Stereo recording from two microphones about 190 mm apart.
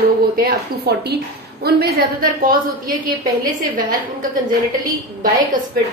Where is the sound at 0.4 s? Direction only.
55° right (ahead or behind).